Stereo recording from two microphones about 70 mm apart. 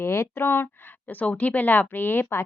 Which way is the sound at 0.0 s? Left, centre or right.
Left.